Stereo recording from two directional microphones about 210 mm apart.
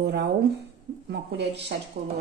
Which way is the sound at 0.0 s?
55° right (ahead or behind).